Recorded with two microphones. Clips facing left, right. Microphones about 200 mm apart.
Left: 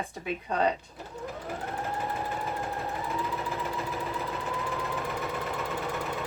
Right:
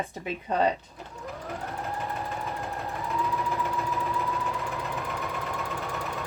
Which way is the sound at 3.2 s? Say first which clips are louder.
Right 3 dB; 30° left (ahead or behind).